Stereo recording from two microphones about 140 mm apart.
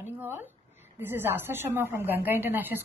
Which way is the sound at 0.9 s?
15° right (ahead or behind).